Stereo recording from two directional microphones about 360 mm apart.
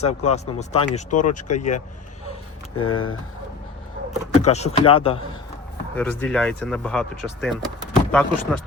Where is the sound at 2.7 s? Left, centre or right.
Left.